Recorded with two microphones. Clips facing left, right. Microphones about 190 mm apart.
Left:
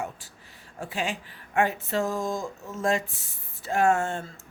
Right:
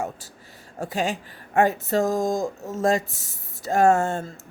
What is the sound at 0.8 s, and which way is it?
Speech, 40° right (ahead or behind).